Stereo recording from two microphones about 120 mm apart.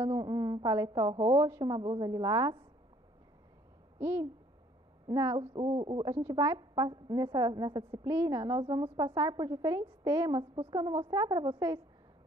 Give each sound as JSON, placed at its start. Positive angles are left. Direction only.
{"t": 0.0, "sound": "a woman's voice", "side_deg": -30}
{"t": 4.0, "sound": "a woman's voice", "side_deg": -20}
{"t": 5.5, "sound": "a woman's voice", "side_deg": -40}
{"t": 6.1, "sound": "a woman's voice", "side_deg": -30}